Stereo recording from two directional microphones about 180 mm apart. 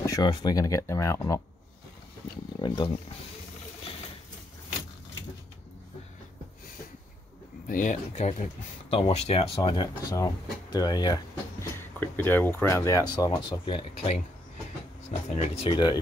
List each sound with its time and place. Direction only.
0.0 s speech: 20° left (ahead or behind)
2.6 s speech: 25° left (ahead or behind)
7.6 s speech: 45° left (ahead or behind); by 11.1 s 20° left (ahead or behind)
11.6 s speech: 10° left (ahead or behind)